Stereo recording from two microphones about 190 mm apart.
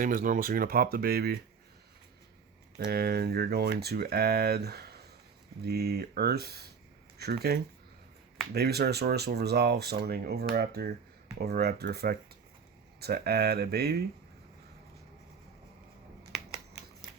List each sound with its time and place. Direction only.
0.0 s speech: 45° right (ahead or behind)
2.7 s speech: 55° right (ahead or behind)